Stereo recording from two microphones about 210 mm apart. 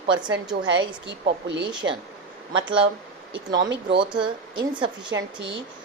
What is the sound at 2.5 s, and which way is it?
A woman's voice, 25° right (ahead or behind).